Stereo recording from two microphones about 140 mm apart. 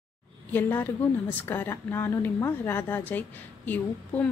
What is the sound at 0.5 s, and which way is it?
A woman's voice, 15° left (ahead or behind).